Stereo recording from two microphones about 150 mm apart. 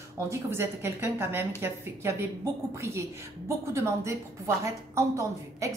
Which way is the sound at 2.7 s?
20° right (ahead or behind).